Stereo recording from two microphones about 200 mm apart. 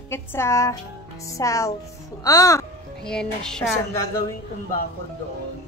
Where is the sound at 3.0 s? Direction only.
5° left (ahead or behind).